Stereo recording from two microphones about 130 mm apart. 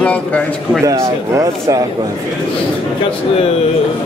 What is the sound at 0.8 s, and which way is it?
Speech, 25° right (ahead or behind).